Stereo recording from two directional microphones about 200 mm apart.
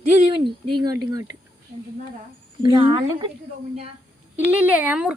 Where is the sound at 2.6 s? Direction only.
25° right (ahead or behind).